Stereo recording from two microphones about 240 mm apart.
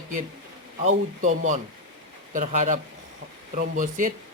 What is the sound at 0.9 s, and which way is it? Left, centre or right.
A man's voice, right.